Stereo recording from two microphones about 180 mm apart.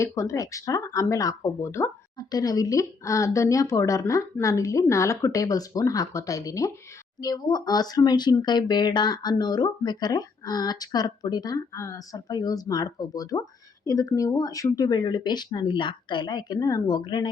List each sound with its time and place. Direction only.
0.0 s speech: 15° left (ahead or behind)